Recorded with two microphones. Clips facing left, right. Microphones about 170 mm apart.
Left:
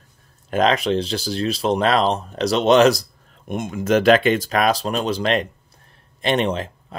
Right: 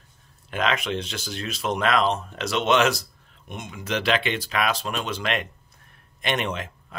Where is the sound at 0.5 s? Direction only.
35° left (ahead or behind).